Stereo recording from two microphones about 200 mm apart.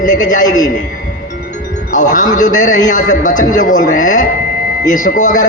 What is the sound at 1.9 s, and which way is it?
A man's voice, 40° left (ahead or behind).